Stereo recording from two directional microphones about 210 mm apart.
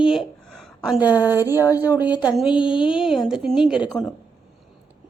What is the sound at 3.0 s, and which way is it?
Speech, centre (ahead or behind).